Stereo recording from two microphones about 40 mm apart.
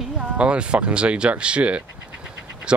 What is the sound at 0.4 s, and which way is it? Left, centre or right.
Speech, right.